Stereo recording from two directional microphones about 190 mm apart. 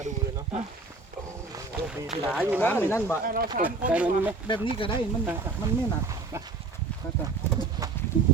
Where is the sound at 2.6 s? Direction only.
10° left (ahead or behind).